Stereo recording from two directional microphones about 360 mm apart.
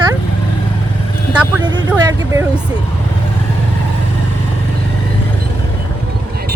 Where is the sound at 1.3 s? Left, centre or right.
Centre.